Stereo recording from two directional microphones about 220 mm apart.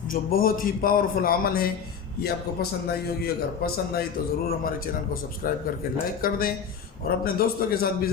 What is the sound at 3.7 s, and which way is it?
A man's voice, 45° left (ahead or behind).